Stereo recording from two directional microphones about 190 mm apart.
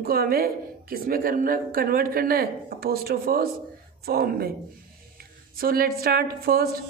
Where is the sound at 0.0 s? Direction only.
50° right (ahead or behind).